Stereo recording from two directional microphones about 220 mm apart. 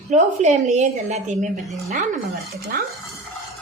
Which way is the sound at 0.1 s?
30° right (ahead or behind).